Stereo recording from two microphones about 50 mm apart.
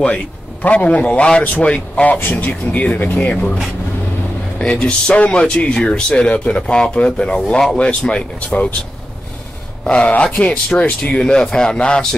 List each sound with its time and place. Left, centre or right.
0.0 s a man's voice: left
1.4 s speech: left
1.7 s a man's voice: left
2.1 s speech: left
4.6 s a man's voice: centre
9.8 s a man's voice: left